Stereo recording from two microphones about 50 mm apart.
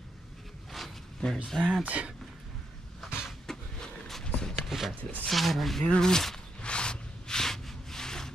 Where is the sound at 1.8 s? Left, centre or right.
Right.